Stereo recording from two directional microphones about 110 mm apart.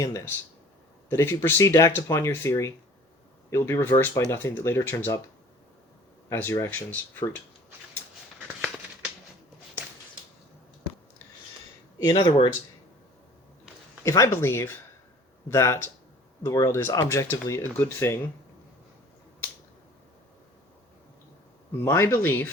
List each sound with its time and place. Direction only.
0.0 s speech: 30° left (ahead or behind)
6.2 s speech: 25° left (ahead or behind)
12.0 s speech: 45° left (ahead or behind)
14.0 s speech: 30° left (ahead or behind)
21.8 s speech: 25° left (ahead or behind)